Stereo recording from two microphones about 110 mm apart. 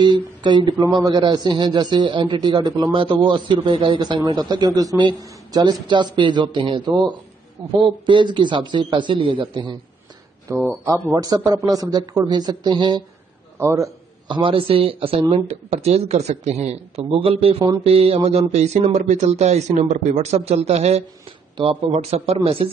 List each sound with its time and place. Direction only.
0.0 s a man's voice: 45° right (ahead or behind)
10.5 s a man's voice: 25° right (ahead or behind); by 13.0 s 45° right (ahead or behind)
13.6 s a man's voice: 30° right (ahead or behind)
14.2 s speech: 50° right (ahead or behind); by 21.0 s 75° right (ahead or behind)
21.6 s a man's voice: 50° right (ahead or behind)
21.9 s speech: 70° right (ahead or behind)